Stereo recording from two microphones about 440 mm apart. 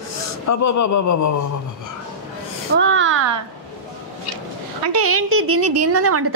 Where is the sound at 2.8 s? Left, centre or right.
Right.